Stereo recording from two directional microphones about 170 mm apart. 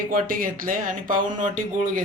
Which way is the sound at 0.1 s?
55° right (ahead or behind).